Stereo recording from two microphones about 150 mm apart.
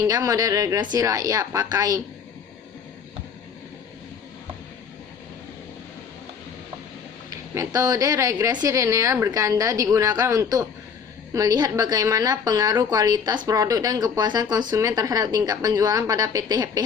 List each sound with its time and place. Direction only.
0.1 s a woman's voice: 25° right (ahead or behind)
7.3 s a woman's voice: 25° right (ahead or behind)